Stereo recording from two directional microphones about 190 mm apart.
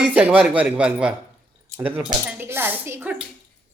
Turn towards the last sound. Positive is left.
turn(degrees=-10)  # may be behind; listen again after turning